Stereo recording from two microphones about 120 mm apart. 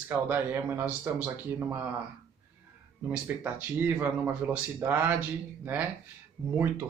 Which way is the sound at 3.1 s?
15° right (ahead or behind).